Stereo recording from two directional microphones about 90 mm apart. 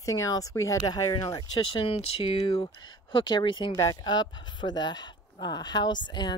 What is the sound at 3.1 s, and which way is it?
Speech, 60° left (ahead or behind).